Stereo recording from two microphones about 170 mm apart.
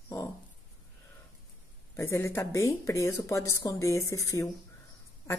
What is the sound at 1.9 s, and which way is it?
Speech, 15° left (ahead or behind).